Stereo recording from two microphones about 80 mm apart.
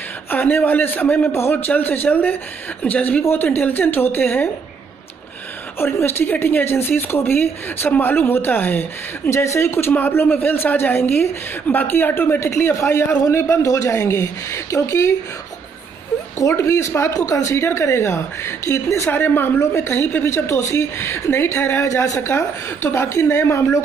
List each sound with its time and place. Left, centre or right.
0.3 s speech: left
5.8 s speech: left
16.3 s speech: left
19.0 s speech: left
21.8 s speech: left